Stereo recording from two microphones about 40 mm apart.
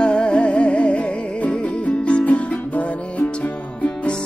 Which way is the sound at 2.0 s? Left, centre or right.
Left.